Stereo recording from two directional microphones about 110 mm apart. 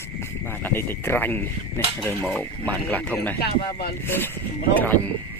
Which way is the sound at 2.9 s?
15° left (ahead or behind).